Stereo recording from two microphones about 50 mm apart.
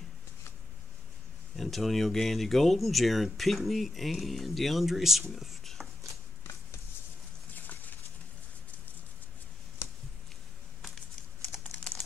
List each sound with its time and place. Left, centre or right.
1.6 s speech: centre
5.3 s whispering: centre
7.5 s a sound: left
11.5 s typing: centre